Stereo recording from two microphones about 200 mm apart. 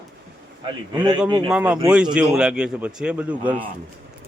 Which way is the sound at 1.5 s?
5° right (ahead or behind).